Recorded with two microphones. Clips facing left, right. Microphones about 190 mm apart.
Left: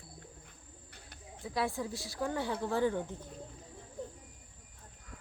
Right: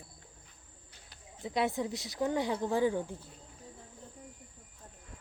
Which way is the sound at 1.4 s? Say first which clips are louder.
Right 3 dB; 20° right (ahead or behind).